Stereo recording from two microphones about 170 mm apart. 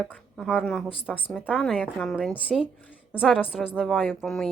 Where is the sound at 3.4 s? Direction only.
5° left (ahead or behind).